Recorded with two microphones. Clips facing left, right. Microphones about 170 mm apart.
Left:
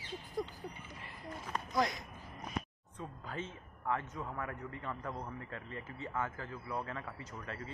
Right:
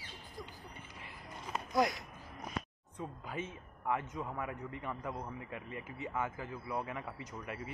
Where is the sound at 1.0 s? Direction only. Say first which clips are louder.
Left 3 dB; 15° right (ahead or behind).